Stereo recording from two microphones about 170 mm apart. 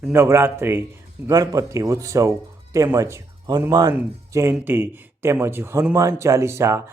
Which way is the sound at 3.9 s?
15° right (ahead or behind).